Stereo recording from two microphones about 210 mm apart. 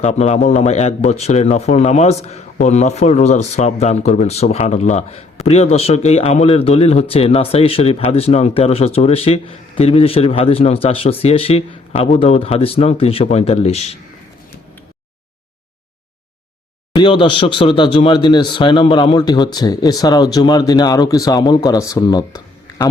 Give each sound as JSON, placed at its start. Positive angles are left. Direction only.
{"t": 0.0, "sound": "a man's voice", "side_deg": 30}
{"t": 16.9, "sound": "a man's voice", "side_deg": 20}